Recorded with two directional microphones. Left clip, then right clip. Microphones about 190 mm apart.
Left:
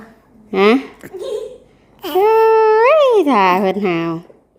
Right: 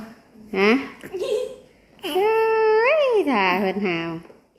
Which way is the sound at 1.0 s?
30° left (ahead or behind).